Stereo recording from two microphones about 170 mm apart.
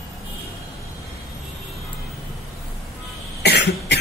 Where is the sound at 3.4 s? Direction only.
75° left (ahead or behind).